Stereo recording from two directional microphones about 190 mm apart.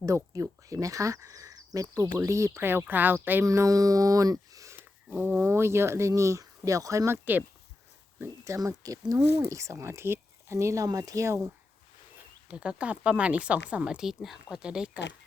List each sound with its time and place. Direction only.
0.0 s speech: 15° right (ahead or behind)
12.5 s a woman's voice: 5° right (ahead or behind)